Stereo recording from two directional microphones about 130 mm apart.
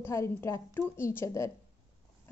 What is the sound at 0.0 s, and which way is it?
A woman's voice, 20° left (ahead or behind).